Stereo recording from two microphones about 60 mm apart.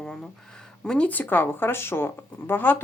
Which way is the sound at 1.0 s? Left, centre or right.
Left.